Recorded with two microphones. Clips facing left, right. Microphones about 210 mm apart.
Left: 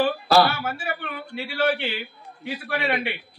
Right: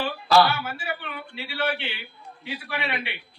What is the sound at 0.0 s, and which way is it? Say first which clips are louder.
A man's voice: left 2 dB; 50° left (ahead or behind).